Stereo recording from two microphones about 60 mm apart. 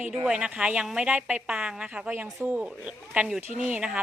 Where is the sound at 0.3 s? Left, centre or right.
Centre.